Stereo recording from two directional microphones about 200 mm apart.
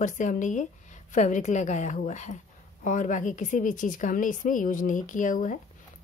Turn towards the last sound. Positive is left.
turn(degrees=40)  # may be behind; listen again after turning